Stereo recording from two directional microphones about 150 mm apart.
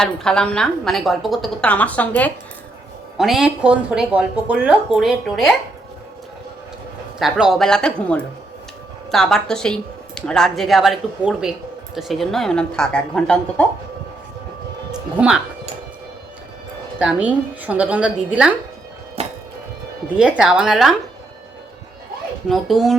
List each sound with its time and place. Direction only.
0.0 s a woman's voice: 5° left (ahead or behind)
3.2 s a woman's voice: centre (ahead or behind)
7.2 s a woman's voice: 5° right (ahead or behind)
17.0 s a woman's voice: 10° right (ahead or behind)
19.2 s music: 45° right (ahead or behind)
20.1 s a woman's voice: 5° right (ahead or behind)
22.4 s a woman's voice: centre (ahead or behind)